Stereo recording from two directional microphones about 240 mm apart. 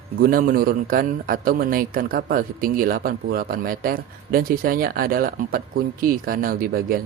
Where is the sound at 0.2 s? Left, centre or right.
Right.